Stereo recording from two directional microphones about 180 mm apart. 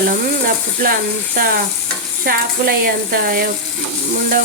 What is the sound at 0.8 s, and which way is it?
Speech, 55° right (ahead or behind).